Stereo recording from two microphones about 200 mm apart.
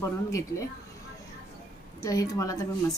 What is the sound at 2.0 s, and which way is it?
Speech, 15° left (ahead or behind).